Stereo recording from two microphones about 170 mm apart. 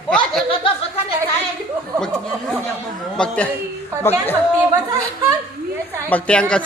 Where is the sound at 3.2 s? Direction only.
10° left (ahead or behind).